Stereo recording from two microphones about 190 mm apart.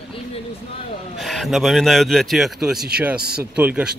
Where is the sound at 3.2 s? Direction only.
55° right (ahead or behind).